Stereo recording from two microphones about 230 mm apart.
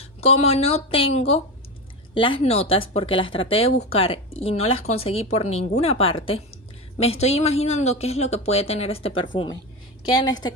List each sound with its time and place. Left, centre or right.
0.0 s a woman's voice: left